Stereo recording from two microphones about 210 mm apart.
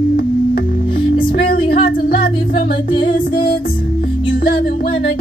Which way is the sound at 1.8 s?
45° left (ahead or behind).